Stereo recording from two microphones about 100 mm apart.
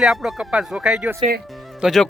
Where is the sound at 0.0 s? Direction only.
5° right (ahead or behind).